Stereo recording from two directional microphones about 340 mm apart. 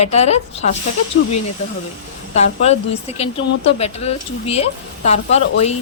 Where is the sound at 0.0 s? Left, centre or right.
Centre.